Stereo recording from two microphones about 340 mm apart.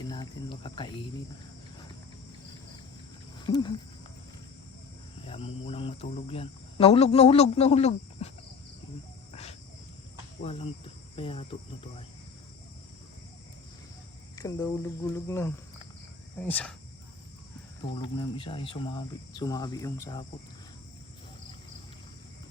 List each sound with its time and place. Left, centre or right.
0.1 s speech: centre
3.4 s speech: centre
5.2 s speech: centre
9.3 s cricket: centre
14.3 s speech: centre
18.0 s speech: centre